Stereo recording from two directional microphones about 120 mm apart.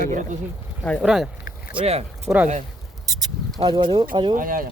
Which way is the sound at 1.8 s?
60° right (ahead or behind).